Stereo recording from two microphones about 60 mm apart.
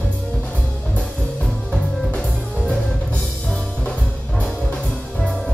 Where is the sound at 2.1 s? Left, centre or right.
Centre.